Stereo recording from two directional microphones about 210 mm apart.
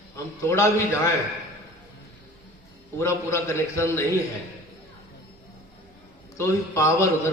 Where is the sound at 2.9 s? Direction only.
15° left (ahead or behind).